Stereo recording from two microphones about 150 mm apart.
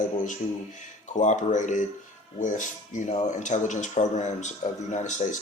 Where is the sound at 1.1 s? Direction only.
55° left (ahead or behind).